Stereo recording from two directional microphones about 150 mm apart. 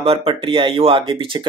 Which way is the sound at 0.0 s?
40° right (ahead or behind).